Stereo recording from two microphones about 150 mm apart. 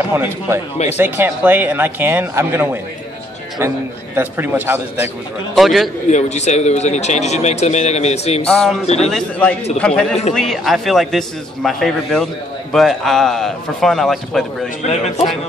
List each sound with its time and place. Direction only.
0.1 s speech: 15° right (ahead or behind)
5.5 s a man's voice: centre (ahead or behind)
6.0 s a man's voice: 50° left (ahead or behind)
8.5 s a man's voice: 5° left (ahead or behind)
8.8 s a man's voice: 45° left (ahead or behind)
9.1 s a man's voice: 10° left (ahead or behind)
14.8 s a man's voice: 45° left (ahead or behind)